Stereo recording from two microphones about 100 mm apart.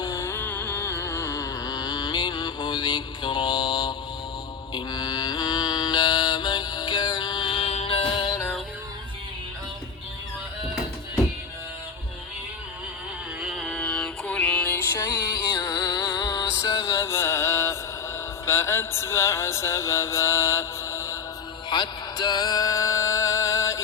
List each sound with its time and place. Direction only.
0.0 s music: 35° left (ahead or behind)
0.3 s a sound: 20° left (ahead or behind); by 3.9 s 45° left (ahead or behind)
4.7 s mantra: 45° left (ahead or behind)
7.6 s music: 80° left; by 8.4 s 55° left (ahead or behind)
13.4 s mantra: centre (ahead or behind); by 14.8 s 15° left (ahead or behind)
15.5 s music: 40° left (ahead or behind); by 17.7 s 25° left (ahead or behind)
18.4 s mantra: 25° left (ahead or behind)
21.7 s music: 45° left (ahead or behind); by 23.8 s 30° left (ahead or behind)